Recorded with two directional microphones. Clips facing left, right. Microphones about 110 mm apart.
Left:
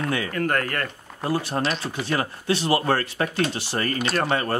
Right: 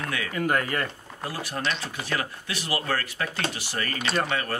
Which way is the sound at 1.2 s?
30° left (ahead or behind).